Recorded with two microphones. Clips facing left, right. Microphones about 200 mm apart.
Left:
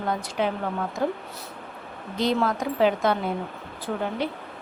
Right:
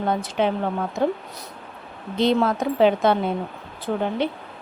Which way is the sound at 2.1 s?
25° right (ahead or behind).